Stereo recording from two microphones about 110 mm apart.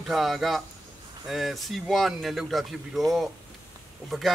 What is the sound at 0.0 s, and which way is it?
Speech, centre (ahead or behind).